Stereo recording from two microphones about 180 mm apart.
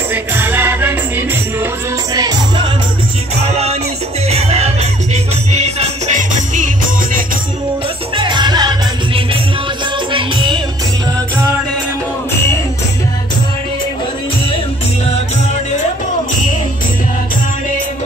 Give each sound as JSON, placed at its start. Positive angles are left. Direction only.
{"t": 0.1, "sound": "music", "side_deg": -10}
{"t": 2.1, "sound": "music", "side_deg": -25}
{"t": 4.3, "sound": "music", "side_deg": -35}
{"t": 8.2, "sound": "music", "side_deg": -25}